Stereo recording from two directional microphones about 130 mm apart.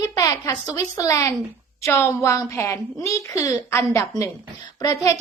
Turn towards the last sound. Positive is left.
turn(degrees=25)  # may be behind; listen again after turning